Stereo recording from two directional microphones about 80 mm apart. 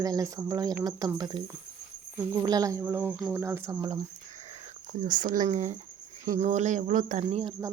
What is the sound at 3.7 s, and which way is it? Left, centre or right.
Speech, right.